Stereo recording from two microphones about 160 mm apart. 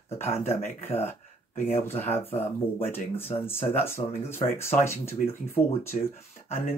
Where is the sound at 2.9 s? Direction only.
15° left (ahead or behind).